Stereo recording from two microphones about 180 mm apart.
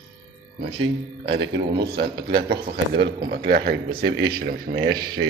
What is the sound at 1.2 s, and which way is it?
A man's voice, 75° right (ahead or behind).